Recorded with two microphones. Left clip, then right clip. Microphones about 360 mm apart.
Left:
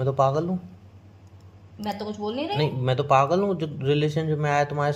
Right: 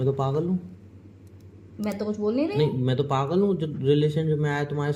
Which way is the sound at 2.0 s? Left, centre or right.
Left.